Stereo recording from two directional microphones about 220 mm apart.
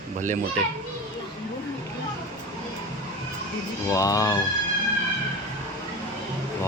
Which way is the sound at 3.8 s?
15° left (ahead or behind).